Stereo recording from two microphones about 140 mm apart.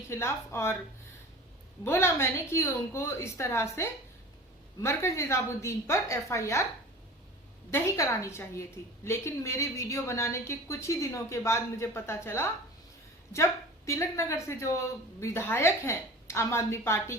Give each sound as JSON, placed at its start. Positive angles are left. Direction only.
{"t": 0.1, "sound": "a woman's voice", "side_deg": 20}
{"t": 1.8, "sound": "a woman's voice", "side_deg": 20}
{"t": 7.7, "sound": "a woman's voice", "side_deg": 20}